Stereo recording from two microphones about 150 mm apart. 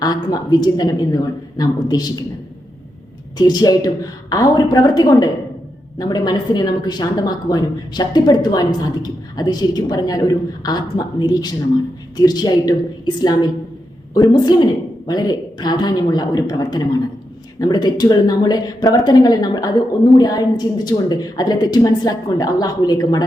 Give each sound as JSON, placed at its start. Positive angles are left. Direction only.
{"t": 0.0, "sound": "a woman's voice", "side_deg": 25}
{"t": 3.3, "sound": "a woman's voice", "side_deg": 25}
{"t": 14.1, "sound": "a woman's voice", "side_deg": 30}